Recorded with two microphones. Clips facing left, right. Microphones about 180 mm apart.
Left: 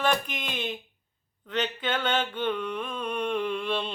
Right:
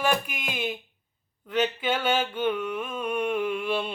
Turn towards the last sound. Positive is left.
turn(degrees=-10)  # may be behind; listen again after turning